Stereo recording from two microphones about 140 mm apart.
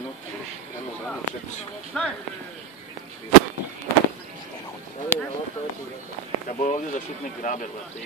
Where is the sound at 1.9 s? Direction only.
5° left (ahead or behind).